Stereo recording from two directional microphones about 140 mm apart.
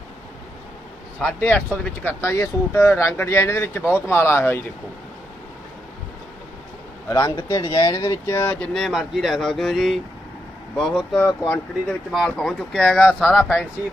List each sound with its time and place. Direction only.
1.2 s speech: 10° left (ahead or behind)
7.1 s speech: 30° left (ahead or behind)
8.6 s speech: 5° left (ahead or behind)